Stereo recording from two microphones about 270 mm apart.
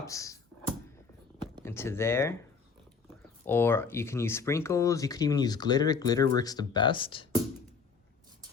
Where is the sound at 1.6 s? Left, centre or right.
Centre.